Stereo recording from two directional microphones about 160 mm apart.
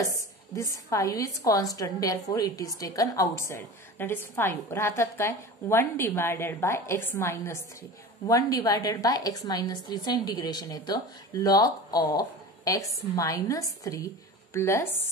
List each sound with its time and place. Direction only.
0.6 s a woman's voice: 20° left (ahead or behind)